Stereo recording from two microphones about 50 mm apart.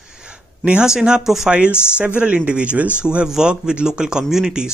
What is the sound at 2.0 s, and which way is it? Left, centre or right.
Speech, right.